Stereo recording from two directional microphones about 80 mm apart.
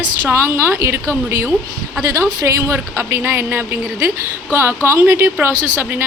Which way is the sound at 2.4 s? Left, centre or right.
Right.